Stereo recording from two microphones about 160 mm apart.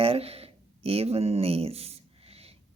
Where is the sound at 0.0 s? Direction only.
40° right (ahead or behind).